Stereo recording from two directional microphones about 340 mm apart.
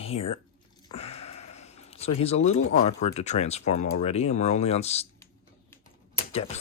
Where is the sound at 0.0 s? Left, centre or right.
Centre.